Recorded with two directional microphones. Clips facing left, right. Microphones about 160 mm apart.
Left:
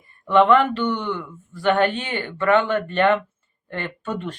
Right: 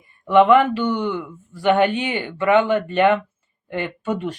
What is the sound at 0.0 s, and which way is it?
Speech, 15° right (ahead or behind).